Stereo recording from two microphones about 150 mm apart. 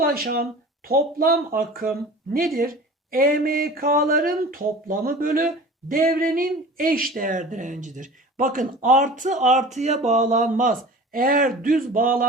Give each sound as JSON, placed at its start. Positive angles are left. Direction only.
{"t": 0.0, "sound": "speech", "side_deg": -80}